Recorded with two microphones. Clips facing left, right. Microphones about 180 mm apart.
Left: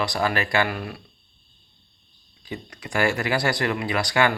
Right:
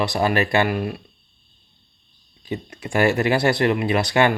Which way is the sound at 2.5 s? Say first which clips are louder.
Right 5 dB; 25° right (ahead or behind).